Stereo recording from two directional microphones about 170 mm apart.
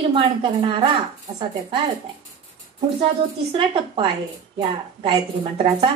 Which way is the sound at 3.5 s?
30° right (ahead or behind).